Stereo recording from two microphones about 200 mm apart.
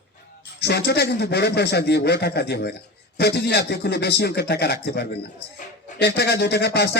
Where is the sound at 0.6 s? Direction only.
55° left (ahead or behind).